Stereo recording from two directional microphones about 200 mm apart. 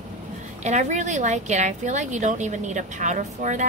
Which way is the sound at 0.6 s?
35° right (ahead or behind).